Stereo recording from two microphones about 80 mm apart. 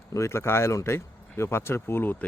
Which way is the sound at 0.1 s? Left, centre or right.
Left.